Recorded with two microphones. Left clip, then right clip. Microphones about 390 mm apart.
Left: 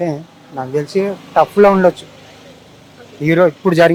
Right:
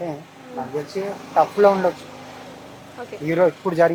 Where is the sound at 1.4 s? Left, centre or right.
Left.